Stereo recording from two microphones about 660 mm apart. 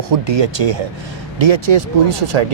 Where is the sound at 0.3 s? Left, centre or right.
Right.